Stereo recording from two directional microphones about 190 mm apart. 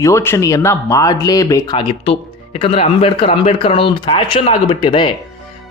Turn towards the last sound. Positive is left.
turn(degrees=25)  # may be behind; listen again after turning